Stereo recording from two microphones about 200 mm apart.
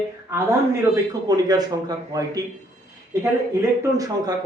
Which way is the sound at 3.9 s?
20° right (ahead or behind).